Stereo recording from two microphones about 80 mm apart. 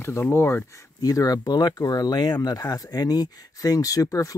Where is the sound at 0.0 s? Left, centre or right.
Left.